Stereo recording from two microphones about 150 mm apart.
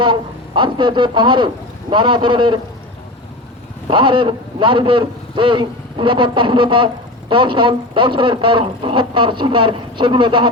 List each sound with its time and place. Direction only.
0.0 s a man's voice: 30° right (ahead or behind)
3.8 s a man's voice: 35° right (ahead or behind)